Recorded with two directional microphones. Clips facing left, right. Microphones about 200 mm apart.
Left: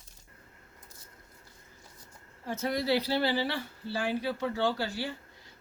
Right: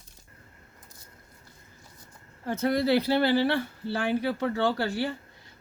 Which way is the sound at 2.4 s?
55° right (ahead or behind).